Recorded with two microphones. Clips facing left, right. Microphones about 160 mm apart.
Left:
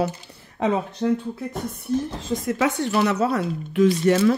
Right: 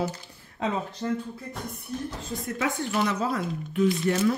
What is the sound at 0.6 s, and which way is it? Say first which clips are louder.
Speech: left 7 dB; 70° left (ahead or behind).